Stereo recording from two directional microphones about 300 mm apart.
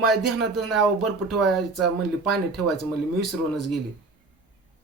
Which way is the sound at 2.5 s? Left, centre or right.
Right.